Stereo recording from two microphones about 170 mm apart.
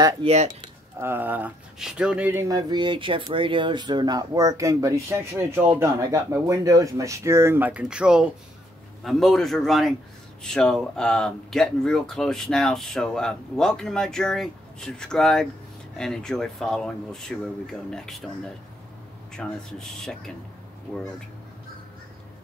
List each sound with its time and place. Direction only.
0.2 s speech: 40° right (ahead or behind)
0.9 s speech: 15° right (ahead or behind)
19.3 s speech: 5° left (ahead or behind)